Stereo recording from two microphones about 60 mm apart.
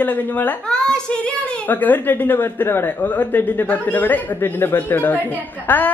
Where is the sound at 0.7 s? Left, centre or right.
Centre.